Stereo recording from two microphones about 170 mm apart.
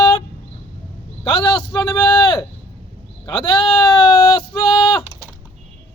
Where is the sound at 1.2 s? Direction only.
25° left (ahead or behind).